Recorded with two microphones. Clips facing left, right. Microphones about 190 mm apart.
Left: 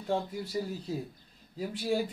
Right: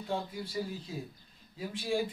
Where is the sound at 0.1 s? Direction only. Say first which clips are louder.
Left 4 dB; 40° left (ahead or behind).